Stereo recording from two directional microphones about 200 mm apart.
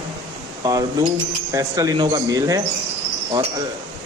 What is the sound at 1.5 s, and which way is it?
A man's voice, 15° right (ahead or behind).